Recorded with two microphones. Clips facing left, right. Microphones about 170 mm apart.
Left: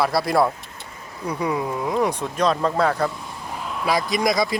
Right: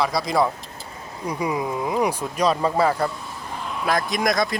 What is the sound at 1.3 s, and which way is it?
Speech, 10° right (ahead or behind).